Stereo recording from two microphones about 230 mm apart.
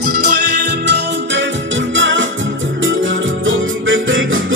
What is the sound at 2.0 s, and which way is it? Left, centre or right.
Music, right.